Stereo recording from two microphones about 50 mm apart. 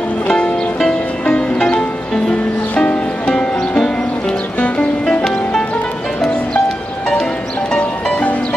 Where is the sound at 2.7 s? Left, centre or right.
Left.